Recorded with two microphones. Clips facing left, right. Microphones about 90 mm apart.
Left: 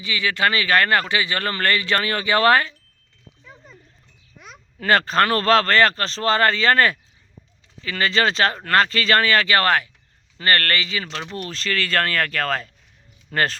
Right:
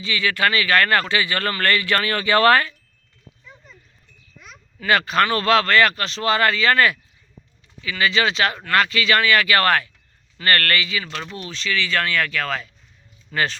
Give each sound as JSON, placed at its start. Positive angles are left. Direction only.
{"t": 0.0, "sound": "speech", "side_deg": 20}
{"t": 4.9, "sound": "speech", "side_deg": 35}
{"t": 11.3, "sound": "speech", "side_deg": 45}